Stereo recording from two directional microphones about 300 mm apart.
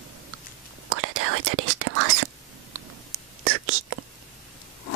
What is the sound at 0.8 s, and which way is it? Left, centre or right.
Whispering, right.